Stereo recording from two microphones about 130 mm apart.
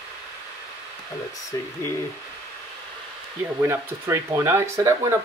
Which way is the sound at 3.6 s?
20° right (ahead or behind).